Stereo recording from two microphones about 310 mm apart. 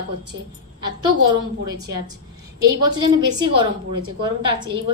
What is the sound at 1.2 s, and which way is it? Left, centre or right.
Speech, right.